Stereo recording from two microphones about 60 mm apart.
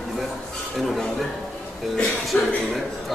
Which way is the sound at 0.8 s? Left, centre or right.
Centre.